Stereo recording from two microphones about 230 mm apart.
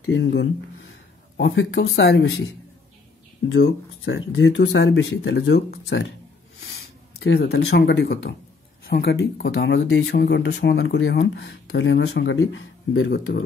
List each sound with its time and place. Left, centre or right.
0.0 s speech: left
7.2 s speech: left